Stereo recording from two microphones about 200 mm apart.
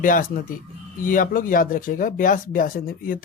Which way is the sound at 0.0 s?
40° left (ahead or behind).